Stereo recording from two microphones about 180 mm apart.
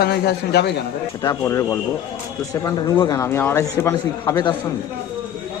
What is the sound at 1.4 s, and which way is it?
Speech, 15° left (ahead or behind).